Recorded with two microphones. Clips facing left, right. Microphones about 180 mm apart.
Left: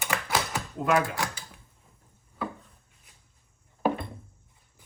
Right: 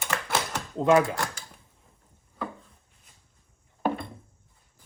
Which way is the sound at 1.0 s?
Centre (ahead or behind).